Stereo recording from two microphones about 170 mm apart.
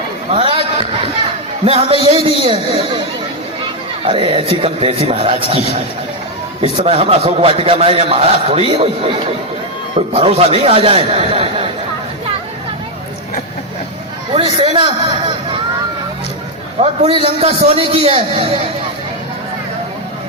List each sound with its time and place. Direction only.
0.3 s a sound: 30° right (ahead or behind)
1.6 s a man's voice: 35° right (ahead or behind)
4.0 s a man's voice: 30° right (ahead or behind)
10.1 s a man's voice: 35° right (ahead or behind)
14.3 s a man's voice: 30° right (ahead or behind)
17.1 s a man's voice: 35° right (ahead or behind)